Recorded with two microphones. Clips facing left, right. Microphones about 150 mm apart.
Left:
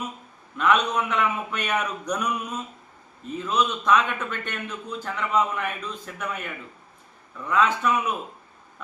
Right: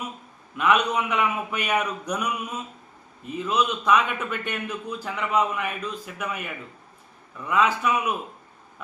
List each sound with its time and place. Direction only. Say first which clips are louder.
0.5 s a man's voice: even; 10° right (ahead or behind)